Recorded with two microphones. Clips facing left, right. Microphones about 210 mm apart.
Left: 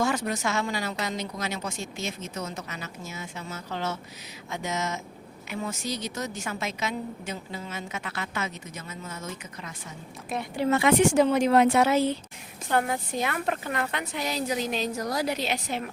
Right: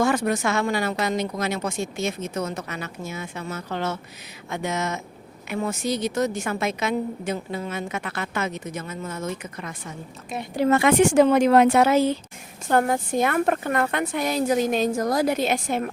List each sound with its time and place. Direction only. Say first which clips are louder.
0.0 s a woman's voice: right 5 dB; 55° right (ahead or behind)
10.5 s a woman's voice: right 4 dB; 45° right (ahead or behind); by 11.9 s 65° right (ahead or behind)
12.6 s a woman's voice: right 5 dB; 45° right (ahead or behind)